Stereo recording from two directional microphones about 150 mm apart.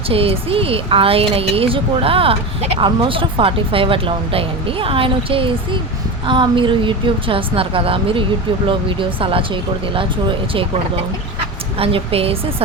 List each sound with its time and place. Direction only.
0.1 s speech: 40° right (ahead or behind)
11.8 s speech: 40° right (ahead or behind)